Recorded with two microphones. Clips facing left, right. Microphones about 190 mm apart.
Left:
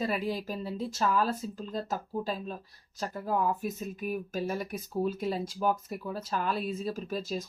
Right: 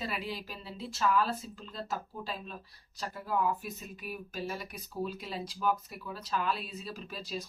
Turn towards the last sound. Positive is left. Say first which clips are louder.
# left 6 dB
turn(degrees=45)  # may be behind; listen again after turning